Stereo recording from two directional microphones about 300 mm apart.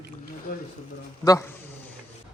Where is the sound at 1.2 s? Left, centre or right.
Centre.